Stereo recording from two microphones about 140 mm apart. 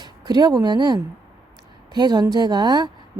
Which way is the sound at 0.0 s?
30° right (ahead or behind).